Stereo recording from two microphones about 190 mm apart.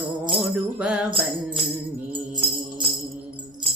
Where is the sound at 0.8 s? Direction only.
5° right (ahead or behind).